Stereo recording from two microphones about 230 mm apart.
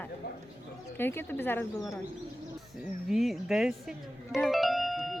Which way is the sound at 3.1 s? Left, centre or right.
Centre.